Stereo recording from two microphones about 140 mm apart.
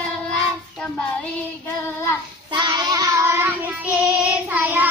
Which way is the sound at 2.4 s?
30° right (ahead or behind).